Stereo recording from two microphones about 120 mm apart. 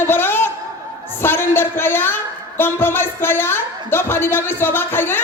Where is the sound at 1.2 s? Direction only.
20° left (ahead or behind).